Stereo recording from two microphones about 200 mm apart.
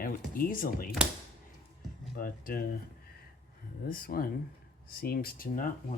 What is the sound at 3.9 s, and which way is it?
Speech, 45° left (ahead or behind).